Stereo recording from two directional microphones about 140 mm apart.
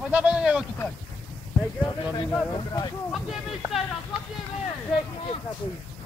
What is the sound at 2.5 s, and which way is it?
Speech, 30° left (ahead or behind).